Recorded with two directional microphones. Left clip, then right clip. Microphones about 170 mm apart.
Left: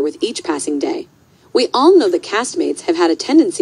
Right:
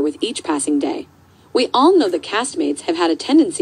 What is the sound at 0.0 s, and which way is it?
A woman's voice, 40° left (ahead or behind).